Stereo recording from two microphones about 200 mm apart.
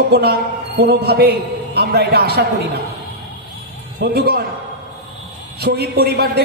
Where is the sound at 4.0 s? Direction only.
50° right (ahead or behind).